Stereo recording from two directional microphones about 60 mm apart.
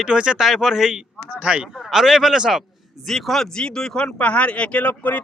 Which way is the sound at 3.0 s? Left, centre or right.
Centre.